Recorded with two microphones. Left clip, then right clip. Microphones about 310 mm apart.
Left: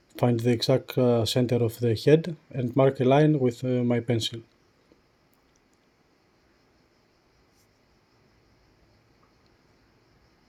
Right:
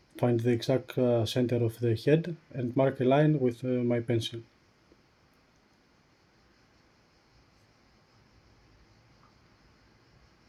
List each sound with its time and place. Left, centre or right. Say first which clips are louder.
0.2 s speech: left 3 dB; left